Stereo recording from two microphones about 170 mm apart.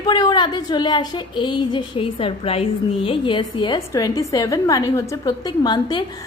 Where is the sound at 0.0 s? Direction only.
25° left (ahead or behind).